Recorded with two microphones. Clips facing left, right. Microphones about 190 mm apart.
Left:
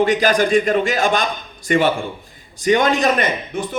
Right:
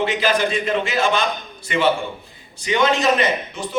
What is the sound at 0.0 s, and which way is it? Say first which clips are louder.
A man's voice: left 4 dB; 45° left (ahead or behind).